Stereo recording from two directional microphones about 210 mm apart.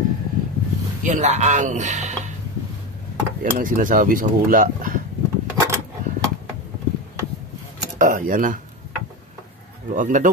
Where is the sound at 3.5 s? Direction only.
40° right (ahead or behind).